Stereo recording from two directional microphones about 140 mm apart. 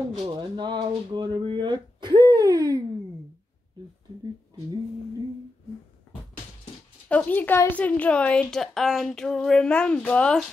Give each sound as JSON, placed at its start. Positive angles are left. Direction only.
{"t": 0.3, "sound": "speech", "side_deg": -30}
{"t": 7.1, "sound": "a woman's voice", "side_deg": 10}